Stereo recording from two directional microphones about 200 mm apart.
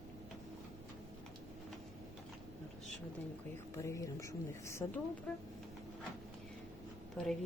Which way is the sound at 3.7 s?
15° left (ahead or behind).